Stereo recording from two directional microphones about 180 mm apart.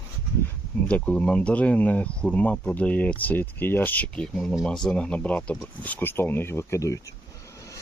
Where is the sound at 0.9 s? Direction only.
5° left (ahead or behind).